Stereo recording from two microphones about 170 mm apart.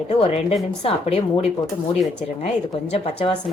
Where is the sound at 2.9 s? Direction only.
35° left (ahead or behind).